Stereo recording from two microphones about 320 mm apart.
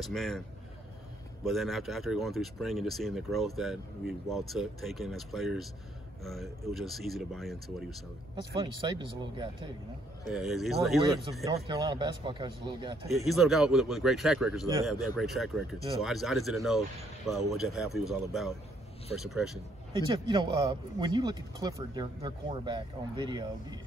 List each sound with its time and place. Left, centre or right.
0.0 s speech: centre
1.4 s speech: centre
8.5 s a man's voice: centre
10.3 s speech: centre
11.5 s a man's voice: centre
13.1 s speech: centre
20.1 s a man's voice: centre